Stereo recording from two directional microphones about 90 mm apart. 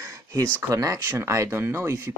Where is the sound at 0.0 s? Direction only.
35° right (ahead or behind).